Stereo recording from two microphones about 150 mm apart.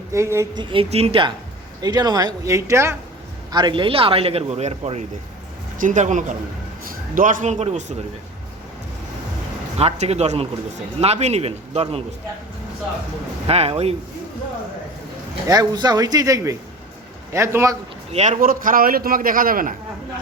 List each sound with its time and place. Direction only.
0.1 s a man's voice: 20° right (ahead or behind)
0.6 s speech: 35° right (ahead or behind)
1.8 s a man's voice: 25° right (ahead or behind)
3.5 s a man's voice: 30° right (ahead or behind); by 7.9 s 50° right (ahead or behind)
9.7 s speech: 45° right (ahead or behind)
13.5 s speech: 45° right (ahead or behind)
15.4 s a man's voice: 25° right (ahead or behind)
18.1 s speech: 50° right (ahead or behind)
18.3 s a man's voice: 70° right (ahead or behind)